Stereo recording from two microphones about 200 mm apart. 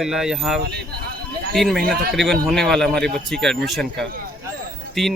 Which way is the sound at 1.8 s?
50° right (ahead or behind).